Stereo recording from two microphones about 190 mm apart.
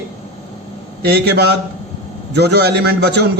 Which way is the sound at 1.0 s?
60° right (ahead or behind).